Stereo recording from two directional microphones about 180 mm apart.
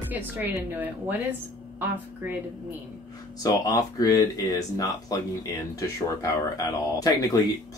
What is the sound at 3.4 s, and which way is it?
Speech, 20° left (ahead or behind).